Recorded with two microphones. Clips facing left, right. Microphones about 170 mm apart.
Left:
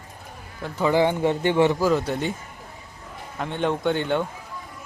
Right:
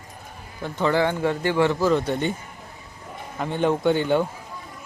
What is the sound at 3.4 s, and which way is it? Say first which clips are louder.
Speech: right 3 dB; centre (ahead or behind).